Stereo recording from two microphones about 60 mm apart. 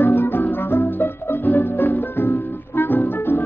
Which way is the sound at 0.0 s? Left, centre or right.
Left.